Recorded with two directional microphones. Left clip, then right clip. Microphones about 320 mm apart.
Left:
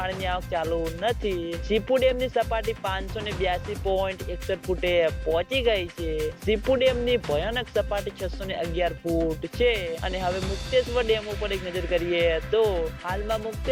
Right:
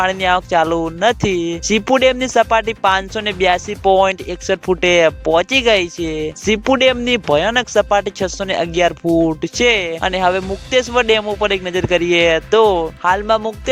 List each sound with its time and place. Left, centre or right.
0.0 s speech: right